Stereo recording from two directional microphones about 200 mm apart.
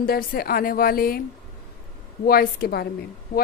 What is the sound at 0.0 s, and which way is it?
Speech, 50° left (ahead or behind).